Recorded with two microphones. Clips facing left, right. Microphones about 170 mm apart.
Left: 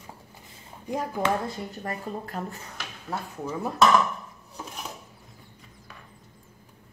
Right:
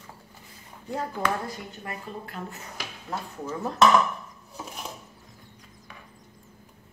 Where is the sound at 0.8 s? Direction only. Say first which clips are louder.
Left 2 dB; 15° left (ahead or behind).